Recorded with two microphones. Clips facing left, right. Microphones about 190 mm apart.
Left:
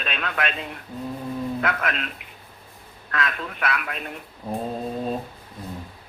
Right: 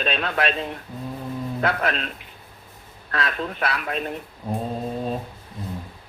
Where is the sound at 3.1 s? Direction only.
35° right (ahead or behind).